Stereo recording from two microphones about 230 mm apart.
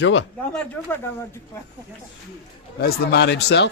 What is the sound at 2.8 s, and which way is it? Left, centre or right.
Speech, left.